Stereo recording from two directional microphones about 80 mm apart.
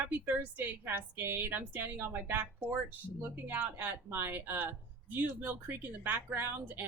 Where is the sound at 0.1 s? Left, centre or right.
Right.